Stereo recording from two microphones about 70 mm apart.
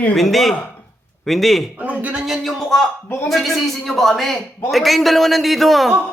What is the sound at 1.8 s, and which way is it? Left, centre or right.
Speech, right.